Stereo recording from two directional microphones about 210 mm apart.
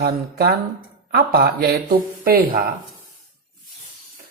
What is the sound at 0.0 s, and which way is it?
Speech, 50° right (ahead or behind).